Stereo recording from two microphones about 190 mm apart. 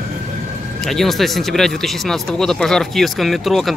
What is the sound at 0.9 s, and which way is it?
Speech, centre (ahead or behind).